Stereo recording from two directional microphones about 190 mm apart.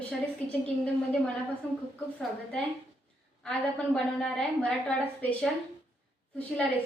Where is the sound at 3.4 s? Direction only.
5° left (ahead or behind).